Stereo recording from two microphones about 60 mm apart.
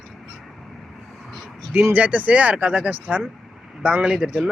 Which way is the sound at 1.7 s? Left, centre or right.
Right.